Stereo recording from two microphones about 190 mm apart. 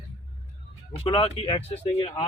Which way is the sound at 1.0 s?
30° left (ahead or behind).